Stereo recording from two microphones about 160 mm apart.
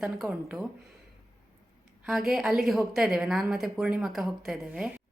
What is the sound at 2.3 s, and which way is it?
A woman's voice, centre (ahead or behind).